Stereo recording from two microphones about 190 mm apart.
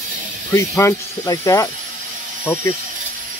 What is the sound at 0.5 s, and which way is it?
Speech, 15° left (ahead or behind).